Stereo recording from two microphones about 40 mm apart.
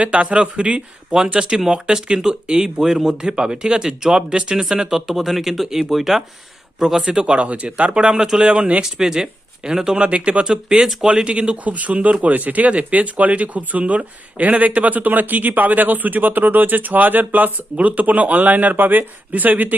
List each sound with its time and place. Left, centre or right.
0.0 s speech: right; by 3.2 s centre
3.2 s speech: right; by 6.1 s centre
6.7 s speech: centre
7.2 s speech: right
8.8 s speech: centre
10.1 s speech: right
10.4 s speech: centre
11.0 s speech: right